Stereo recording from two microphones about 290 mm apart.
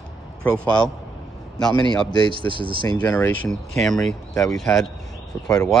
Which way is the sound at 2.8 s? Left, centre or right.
Centre.